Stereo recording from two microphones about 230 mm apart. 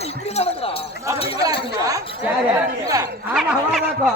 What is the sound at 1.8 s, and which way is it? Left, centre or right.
Speech, centre.